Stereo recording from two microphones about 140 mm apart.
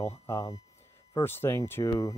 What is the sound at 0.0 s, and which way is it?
Speech, 20° left (ahead or behind).